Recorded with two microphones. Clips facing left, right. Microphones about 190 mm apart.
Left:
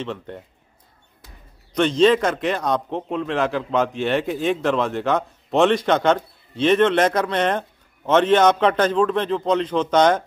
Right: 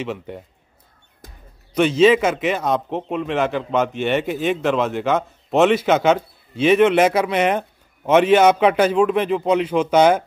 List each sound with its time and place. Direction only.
0.0 s a man's voice: 5° right (ahead or behind)
1.2 s basketball bounce: 50° right (ahead or behind)
1.7 s a man's voice: 5° right (ahead or behind)